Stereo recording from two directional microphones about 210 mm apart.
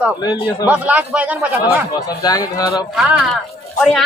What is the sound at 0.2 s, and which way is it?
Speech, 20° left (ahead or behind).